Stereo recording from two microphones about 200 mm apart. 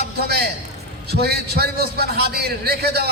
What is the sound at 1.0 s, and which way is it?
A man's voice, 55° right (ahead or behind).